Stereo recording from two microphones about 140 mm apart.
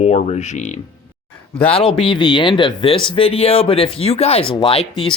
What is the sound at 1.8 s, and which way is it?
Speech, 40° left (ahead or behind).